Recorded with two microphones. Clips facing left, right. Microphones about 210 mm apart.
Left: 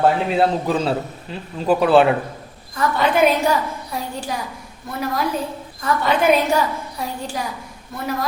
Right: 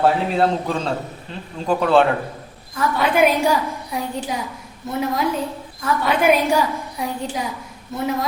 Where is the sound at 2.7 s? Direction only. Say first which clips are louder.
Left 1 dB; 5° right (ahead or behind).